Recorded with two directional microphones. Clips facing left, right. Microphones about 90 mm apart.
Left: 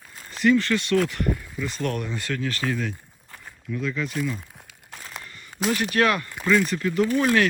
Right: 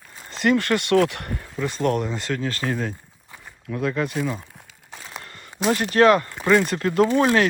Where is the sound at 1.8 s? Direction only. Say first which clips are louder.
Right 6 dB; 25° right (ahead or behind).